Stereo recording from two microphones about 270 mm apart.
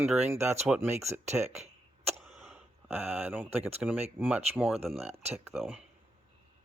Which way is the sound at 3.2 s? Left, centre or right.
Centre.